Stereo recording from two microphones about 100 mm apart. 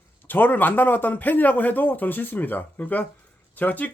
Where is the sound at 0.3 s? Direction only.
20° left (ahead or behind).